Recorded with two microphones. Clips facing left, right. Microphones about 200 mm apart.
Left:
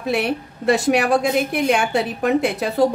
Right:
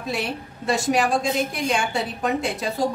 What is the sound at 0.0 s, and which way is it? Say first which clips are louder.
A woman's voice: left 6 dB; 65° left (ahead or behind).